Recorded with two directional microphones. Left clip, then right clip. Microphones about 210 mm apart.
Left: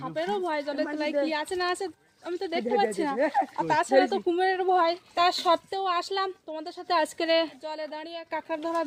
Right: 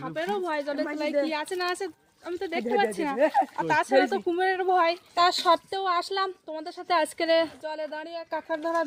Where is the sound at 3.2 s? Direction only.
60° right (ahead or behind).